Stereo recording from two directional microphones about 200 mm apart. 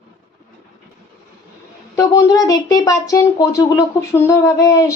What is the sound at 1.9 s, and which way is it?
Speech, 15° left (ahead or behind).